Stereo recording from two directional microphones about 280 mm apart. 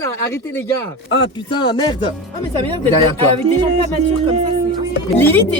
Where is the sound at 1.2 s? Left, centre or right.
Centre.